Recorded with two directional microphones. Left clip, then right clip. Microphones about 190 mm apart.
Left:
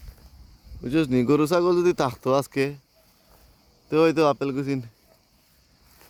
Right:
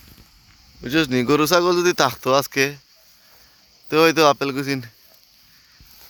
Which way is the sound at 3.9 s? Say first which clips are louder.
Right 5 dB; 5° right (ahead or behind).